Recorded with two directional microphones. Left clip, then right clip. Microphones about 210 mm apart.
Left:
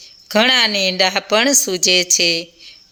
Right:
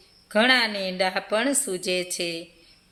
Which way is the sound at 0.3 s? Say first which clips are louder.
Left 6 dB; 35° left (ahead or behind).